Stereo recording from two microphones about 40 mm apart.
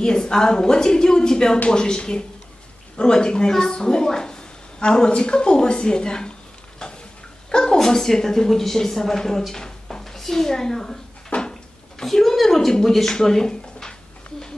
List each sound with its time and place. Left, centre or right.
0.0 s a woman's voice: centre
6.8 s stir: centre
7.5 s speech: centre
9.6 s a sound: centre
11.2 s a sound: left
12.0 s speech: centre